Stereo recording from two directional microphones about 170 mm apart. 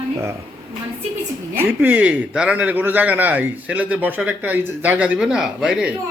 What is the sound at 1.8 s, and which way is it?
A man's voice, 10° right (ahead or behind).